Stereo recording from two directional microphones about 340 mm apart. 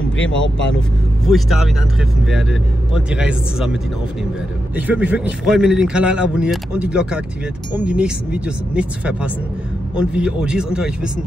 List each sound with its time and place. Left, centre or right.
0.3 s speech: left
1.2 s speech: centre
4.7 s speech: centre